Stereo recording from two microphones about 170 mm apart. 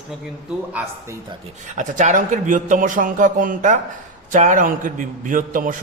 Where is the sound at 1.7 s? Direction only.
45° right (ahead or behind).